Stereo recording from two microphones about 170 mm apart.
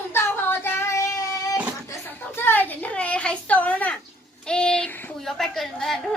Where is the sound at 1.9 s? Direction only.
15° left (ahead or behind).